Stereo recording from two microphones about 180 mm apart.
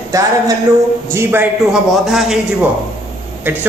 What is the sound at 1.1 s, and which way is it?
A man's voice, 10° right (ahead or behind).